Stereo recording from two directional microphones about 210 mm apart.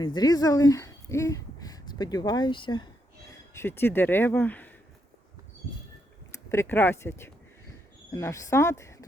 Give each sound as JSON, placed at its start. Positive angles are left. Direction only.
{"t": 0.0, "sound": "speech", "side_deg": 20}
{"t": 3.5, "sound": "speech", "side_deg": 10}
{"t": 6.3, "sound": "speech", "side_deg": 15}